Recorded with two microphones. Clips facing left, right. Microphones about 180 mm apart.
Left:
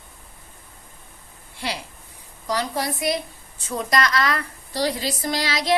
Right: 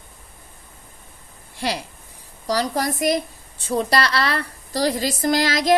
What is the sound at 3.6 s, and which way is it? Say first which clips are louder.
A woman's voice: right 3 dB; 30° right (ahead or behind).